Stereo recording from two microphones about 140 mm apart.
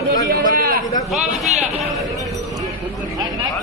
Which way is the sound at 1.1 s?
Centre (ahead or behind).